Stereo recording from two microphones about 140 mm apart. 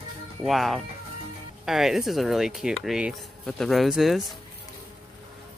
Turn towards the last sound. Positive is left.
turn(degrees=0)  # may be behind; listen again after turning